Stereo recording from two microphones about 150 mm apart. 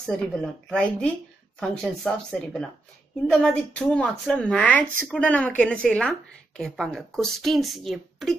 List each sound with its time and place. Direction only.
0.0 s a woman's voice: 5° left (ahead or behind)